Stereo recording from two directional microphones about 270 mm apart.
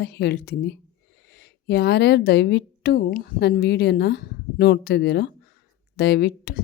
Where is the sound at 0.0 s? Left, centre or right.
Left.